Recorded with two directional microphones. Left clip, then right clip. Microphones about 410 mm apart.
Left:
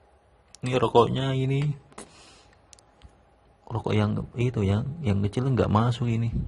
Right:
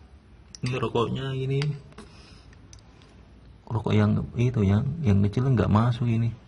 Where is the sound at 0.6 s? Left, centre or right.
Centre.